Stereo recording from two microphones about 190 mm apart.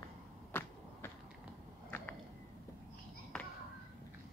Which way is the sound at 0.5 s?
10° left (ahead or behind).